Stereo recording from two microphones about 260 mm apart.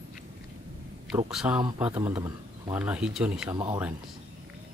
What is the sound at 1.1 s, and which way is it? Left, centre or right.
Speech, centre.